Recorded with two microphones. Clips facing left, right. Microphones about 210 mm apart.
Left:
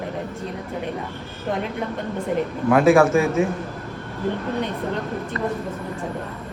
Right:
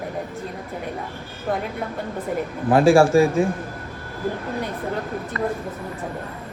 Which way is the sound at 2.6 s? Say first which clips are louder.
Even; 30° right (ahead or behind).